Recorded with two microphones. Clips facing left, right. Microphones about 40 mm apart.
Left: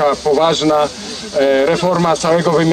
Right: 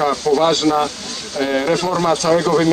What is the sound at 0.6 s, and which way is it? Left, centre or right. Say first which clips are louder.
A man's voice: left 3 dB; centre.